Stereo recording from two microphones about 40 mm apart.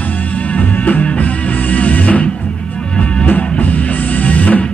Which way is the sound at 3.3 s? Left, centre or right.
Left.